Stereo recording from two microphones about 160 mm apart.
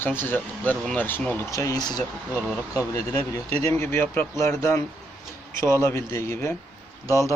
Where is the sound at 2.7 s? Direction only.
20° left (ahead or behind).